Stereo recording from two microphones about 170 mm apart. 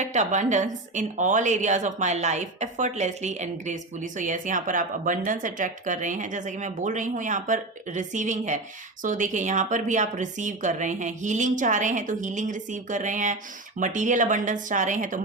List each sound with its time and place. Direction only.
0.0 s a woman's voice: 45° right (ahead or behind)